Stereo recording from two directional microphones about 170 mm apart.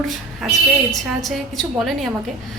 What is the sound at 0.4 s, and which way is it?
Speech, centre (ahead or behind).